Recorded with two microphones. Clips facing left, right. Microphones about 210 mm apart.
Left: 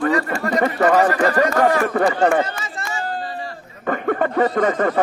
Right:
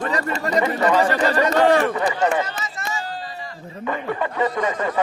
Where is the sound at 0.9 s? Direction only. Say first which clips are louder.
Left 2 dB; 30° right (ahead or behind).